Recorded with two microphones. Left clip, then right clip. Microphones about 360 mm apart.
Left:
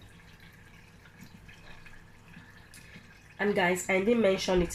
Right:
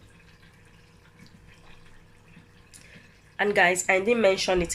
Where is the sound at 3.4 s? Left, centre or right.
Right.